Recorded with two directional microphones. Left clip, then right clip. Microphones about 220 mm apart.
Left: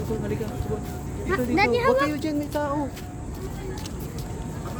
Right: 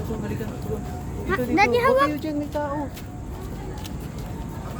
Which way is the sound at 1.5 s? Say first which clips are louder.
Right 3 dB; 30° right (ahead or behind).